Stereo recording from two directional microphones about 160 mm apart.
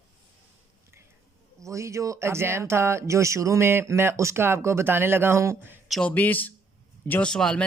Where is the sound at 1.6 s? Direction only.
20° right (ahead or behind).